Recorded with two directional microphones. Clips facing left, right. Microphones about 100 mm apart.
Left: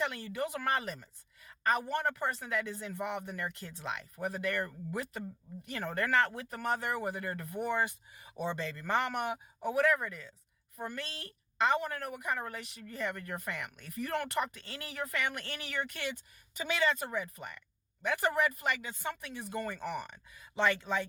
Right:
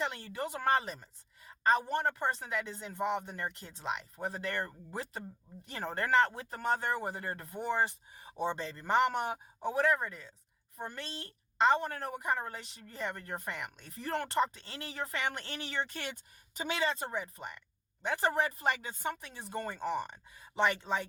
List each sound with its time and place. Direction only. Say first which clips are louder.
0.0 s a woman's voice: left 1 dB; 25° right (ahead or behind)